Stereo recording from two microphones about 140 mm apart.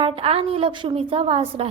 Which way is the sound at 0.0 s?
45° right (ahead or behind).